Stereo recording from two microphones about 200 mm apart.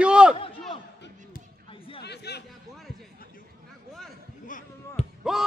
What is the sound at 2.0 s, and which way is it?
Chatter, 55° left (ahead or behind).